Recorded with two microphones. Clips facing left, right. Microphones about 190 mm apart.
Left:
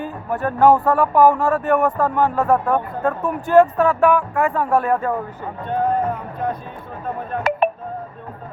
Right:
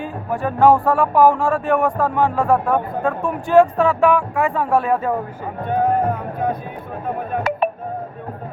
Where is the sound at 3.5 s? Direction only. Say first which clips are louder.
Even; 15° right (ahead or behind).